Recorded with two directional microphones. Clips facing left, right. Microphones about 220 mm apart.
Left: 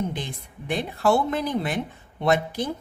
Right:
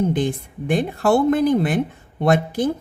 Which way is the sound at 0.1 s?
50° right (ahead or behind).